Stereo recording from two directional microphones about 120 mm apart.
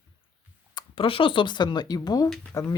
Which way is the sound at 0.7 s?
40° left (ahead or behind).